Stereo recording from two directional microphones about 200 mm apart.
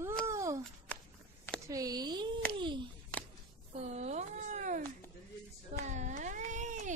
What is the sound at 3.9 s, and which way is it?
Cat, 35° right (ahead or behind).